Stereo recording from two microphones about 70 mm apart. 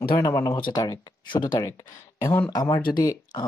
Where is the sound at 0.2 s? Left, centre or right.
Left.